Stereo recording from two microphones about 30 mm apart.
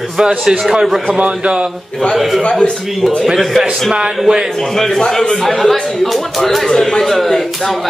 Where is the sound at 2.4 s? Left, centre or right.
Left.